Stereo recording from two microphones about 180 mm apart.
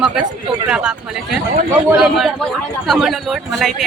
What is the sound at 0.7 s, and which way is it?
A man's voice, 5° right (ahead or behind).